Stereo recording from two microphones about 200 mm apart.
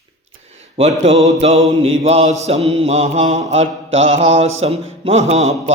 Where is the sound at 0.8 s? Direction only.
30° right (ahead or behind).